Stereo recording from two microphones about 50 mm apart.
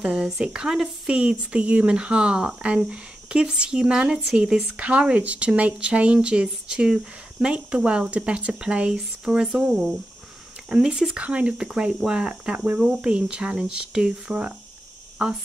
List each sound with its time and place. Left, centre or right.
0.0 s speech: centre
11.1 s speech: right